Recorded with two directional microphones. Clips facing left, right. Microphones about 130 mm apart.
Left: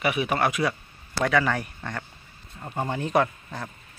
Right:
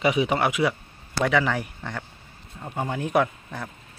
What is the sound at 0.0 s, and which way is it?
A man's voice, 20° right (ahead or behind).